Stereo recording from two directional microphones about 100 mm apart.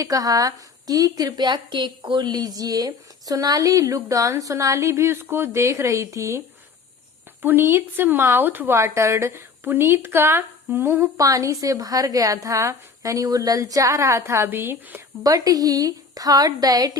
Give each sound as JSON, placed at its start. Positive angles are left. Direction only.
{"t": 0.0, "sound": "a woman's voice", "side_deg": -35}
{"t": 7.4, "sound": "speech", "side_deg": -20}
{"t": 11.2, "sound": "a woman's voice", "side_deg": -35}
{"t": 15.2, "sound": "a woman's voice", "side_deg": -35}